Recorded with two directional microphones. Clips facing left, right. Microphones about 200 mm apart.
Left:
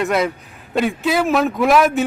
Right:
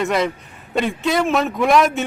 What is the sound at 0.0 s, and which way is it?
A man's voice, centre (ahead or behind).